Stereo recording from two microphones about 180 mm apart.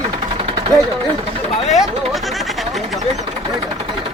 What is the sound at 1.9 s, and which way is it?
Speech, 35° right (ahead or behind).